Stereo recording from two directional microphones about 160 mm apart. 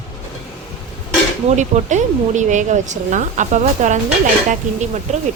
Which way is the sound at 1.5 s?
45° right (ahead or behind).